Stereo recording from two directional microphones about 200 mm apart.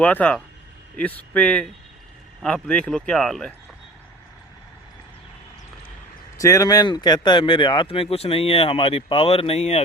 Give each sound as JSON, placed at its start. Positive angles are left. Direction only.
{"t": 0.0, "sound": "speech", "side_deg": 5}
{"t": 6.3, "sound": "speech", "side_deg": 15}